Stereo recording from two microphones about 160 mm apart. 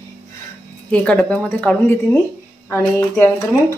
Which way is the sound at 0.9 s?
5° left (ahead or behind).